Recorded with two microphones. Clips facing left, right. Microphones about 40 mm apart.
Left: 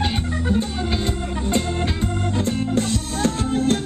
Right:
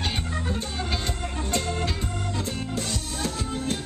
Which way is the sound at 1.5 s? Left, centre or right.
Left.